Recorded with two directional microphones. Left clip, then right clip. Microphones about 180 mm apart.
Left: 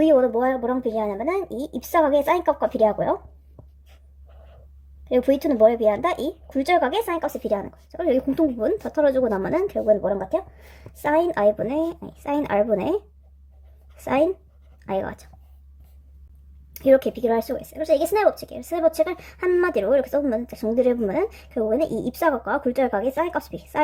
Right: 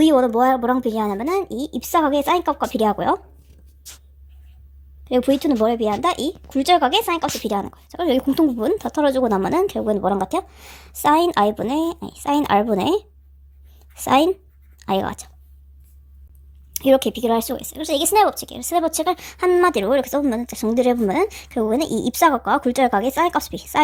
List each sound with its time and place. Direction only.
0.0 s a woman's voice: 30° right (ahead or behind)
5.0 s a woman's voice: 35° right (ahead or behind)
16.7 s a woman's voice: 25° right (ahead or behind)